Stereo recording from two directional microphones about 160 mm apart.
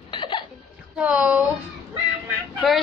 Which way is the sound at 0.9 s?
5° right (ahead or behind).